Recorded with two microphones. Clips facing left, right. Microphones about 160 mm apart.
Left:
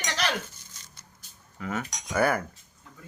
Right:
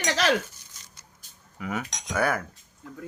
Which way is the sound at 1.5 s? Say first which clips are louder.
Right 1 dB; 10° right (ahead or behind).